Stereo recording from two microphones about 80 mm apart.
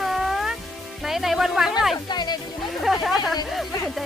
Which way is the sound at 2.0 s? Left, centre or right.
Left.